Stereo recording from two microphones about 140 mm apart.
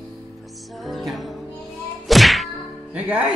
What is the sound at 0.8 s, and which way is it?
Music, centre (ahead or behind).